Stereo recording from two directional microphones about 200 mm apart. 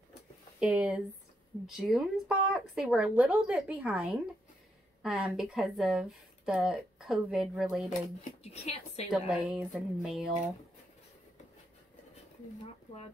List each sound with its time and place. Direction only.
0.6 s speech: 5° right (ahead or behind)
8.2 s speech: 30° left (ahead or behind)
9.1 s speech: 5° right (ahead or behind)